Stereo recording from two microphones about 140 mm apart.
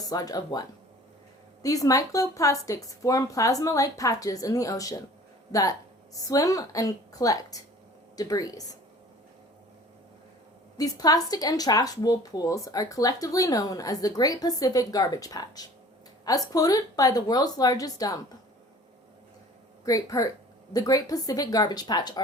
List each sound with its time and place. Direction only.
0.0 s a woman's voice: 25° left (ahead or behind)
1.6 s a woman's voice: 25° left (ahead or behind)
10.8 s a woman's voice: 25° left (ahead or behind)
19.8 s a woman's voice: 25° left (ahead or behind)